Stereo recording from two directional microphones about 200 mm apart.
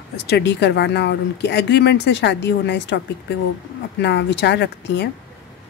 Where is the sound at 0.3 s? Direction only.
60° left (ahead or behind).